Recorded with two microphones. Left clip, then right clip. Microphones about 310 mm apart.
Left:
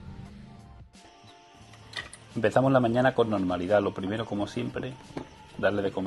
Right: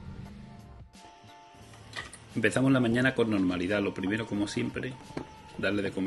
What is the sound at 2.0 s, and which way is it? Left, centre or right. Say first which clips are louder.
Tick-tock: left 2 dB; centre.